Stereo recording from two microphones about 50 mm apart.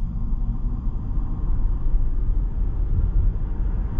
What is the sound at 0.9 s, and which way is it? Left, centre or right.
Vehicle, right.